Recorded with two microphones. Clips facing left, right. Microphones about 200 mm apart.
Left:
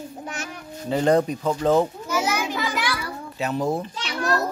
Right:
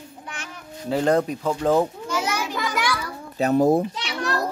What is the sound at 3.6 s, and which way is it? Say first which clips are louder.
Speech: right 7 dB; 55° right (ahead or behind).